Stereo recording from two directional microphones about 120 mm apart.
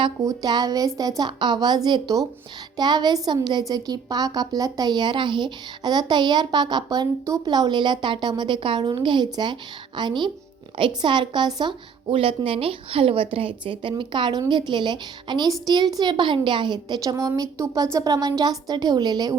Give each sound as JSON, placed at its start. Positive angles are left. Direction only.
{"t": 0.0, "sound": "a woman's voice", "side_deg": -35}